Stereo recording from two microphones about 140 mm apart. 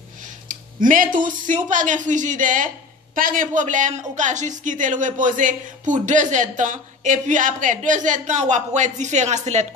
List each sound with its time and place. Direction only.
0.2 s a man's voice: 70° right (ahead or behind)